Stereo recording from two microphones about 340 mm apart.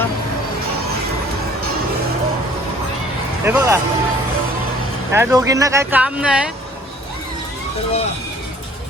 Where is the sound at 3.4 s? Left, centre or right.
Centre.